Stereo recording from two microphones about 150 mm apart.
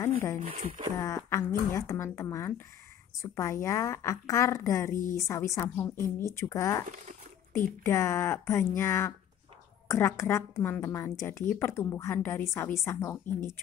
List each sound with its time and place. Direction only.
0.4 s speech: 65° right (ahead or behind)
1.0 s a woman's voice: 20° left (ahead or behind)